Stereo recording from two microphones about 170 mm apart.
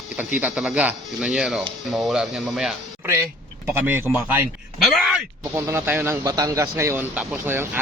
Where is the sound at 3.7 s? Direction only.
10° right (ahead or behind).